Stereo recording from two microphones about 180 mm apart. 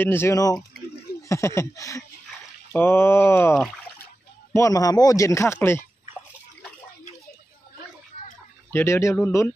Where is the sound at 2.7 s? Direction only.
15° left (ahead or behind).